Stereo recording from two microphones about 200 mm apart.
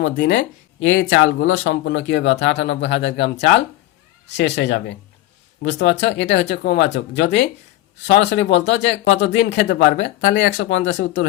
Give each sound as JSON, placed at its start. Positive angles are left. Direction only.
{"t": 0.0, "sound": "speech", "side_deg": 60}
{"t": 4.4, "sound": "speech", "side_deg": 60}